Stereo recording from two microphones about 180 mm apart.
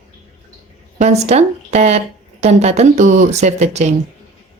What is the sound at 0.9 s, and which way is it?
Speech, 40° right (ahead or behind).